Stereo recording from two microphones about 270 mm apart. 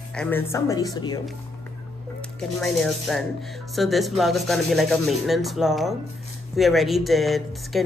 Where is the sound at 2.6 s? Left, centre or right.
Centre.